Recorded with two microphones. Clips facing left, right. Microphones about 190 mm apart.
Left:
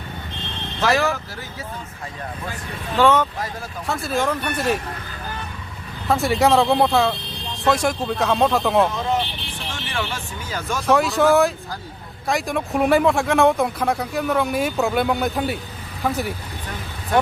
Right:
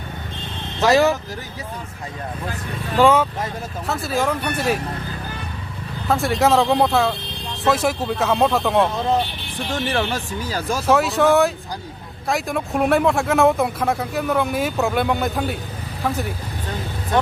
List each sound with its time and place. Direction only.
0.8 s speech: 20° right (ahead or behind)
3.0 s speech: 10° right (ahead or behind)
6.1 s speech: centre (ahead or behind)
9.0 s speech: 35° right (ahead or behind)
10.8 s speech: centre (ahead or behind)